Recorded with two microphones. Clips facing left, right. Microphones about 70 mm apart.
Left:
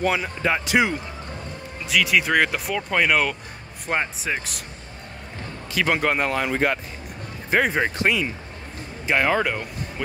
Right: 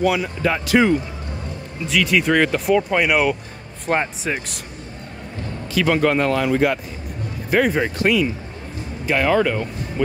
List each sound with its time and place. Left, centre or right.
0.1 s speech: left
1.9 s speech: centre
5.8 s speech: left
6.5 s speech: left
7.5 s speech: left
10.0 s speech: centre